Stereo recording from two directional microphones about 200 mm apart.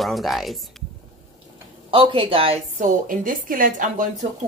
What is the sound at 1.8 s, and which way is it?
A woman's voice, 25° right (ahead or behind).